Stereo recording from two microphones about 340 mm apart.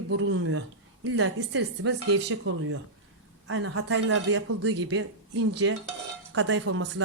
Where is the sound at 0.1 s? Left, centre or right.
Right.